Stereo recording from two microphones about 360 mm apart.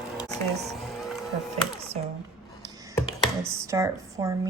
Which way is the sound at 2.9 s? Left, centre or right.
Centre.